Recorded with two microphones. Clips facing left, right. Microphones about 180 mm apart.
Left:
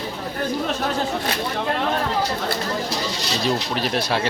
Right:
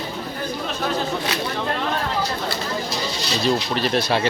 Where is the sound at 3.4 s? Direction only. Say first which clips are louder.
Right 2 dB; 10° left (ahead or behind).